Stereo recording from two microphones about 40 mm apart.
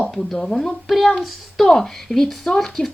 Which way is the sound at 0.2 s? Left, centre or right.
Centre.